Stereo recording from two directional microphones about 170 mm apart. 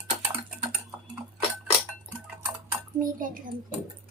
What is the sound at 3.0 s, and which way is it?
Speech, 55° right (ahead or behind).